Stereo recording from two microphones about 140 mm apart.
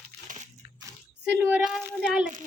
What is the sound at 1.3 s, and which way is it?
Speech, 5° right (ahead or behind).